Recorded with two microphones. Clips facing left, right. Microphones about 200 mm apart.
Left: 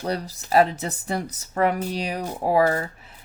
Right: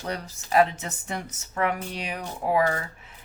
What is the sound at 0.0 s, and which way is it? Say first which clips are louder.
Speech: left 5 dB; 35° left (ahead or behind).